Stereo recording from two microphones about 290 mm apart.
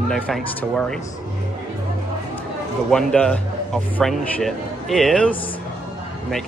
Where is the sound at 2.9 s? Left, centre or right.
Centre.